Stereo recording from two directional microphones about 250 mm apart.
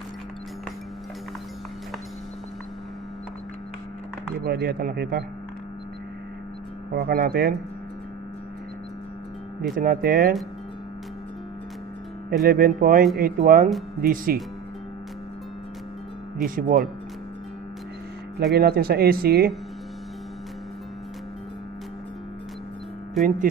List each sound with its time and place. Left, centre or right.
4.5 s speech: right
6.9 s speech: right
9.6 s speech: right
12.3 s speech: right
16.4 s speech: right
18.5 s speech: right
23.2 s speech: centre